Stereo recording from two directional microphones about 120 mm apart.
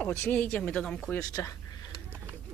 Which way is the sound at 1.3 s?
30° left (ahead or behind).